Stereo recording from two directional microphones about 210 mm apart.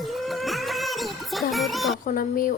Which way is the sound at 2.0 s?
40° left (ahead or behind).